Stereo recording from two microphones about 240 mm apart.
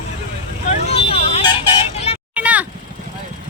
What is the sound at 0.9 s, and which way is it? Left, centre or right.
Vehicle, left.